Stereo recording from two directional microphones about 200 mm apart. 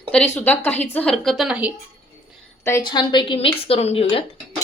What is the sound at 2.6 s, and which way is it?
Speech, 20° left (ahead or behind).